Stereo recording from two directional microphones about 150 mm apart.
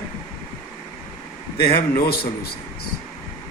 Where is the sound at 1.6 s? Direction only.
90° left.